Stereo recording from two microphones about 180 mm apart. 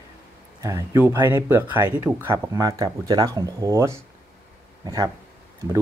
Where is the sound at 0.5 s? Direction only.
15° right (ahead or behind).